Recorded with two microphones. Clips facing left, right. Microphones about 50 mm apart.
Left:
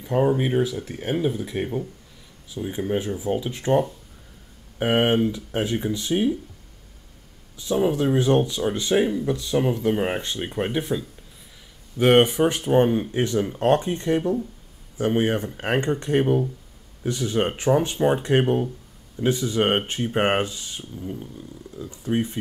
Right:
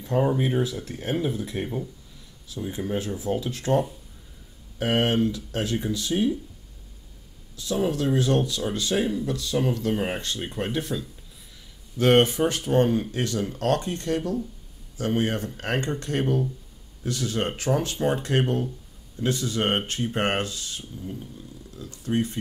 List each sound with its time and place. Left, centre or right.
0.0 s speech: centre
2.5 s speech: left
7.5 s speech: left